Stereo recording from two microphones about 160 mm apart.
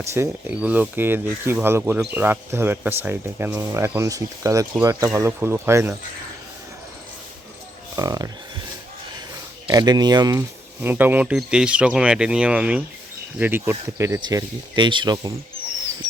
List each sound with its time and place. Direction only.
0.1 s speech: 15° right (ahead or behind)
7.9 s speech: 20° right (ahead or behind)
9.3 s speech: 25° right (ahead or behind)
10.8 s speech: 10° right (ahead or behind)